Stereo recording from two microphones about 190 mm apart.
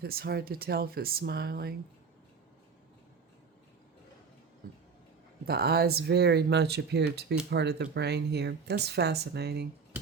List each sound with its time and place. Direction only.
0.0 s speech: 55° right (ahead or behind)
5.5 s speech: 55° right (ahead or behind)
9.9 s music: 5° right (ahead or behind)